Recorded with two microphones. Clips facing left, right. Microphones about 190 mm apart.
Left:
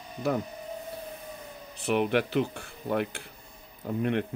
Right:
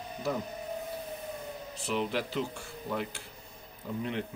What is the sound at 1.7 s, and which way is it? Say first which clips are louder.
Speech: left 7 dB; 60° left (ahead or behind).